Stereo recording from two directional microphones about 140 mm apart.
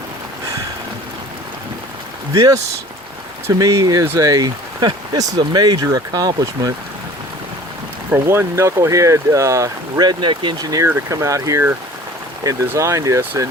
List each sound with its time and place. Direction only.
2.3 s speech: 25° right (ahead or behind)
8.1 s speech: 20° right (ahead or behind)